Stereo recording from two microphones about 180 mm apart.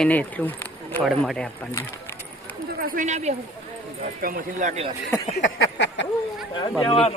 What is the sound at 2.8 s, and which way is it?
Speech, 45° right (ahead or behind).